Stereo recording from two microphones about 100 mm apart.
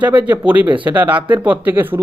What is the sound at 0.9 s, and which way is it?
Speech, 15° right (ahead or behind).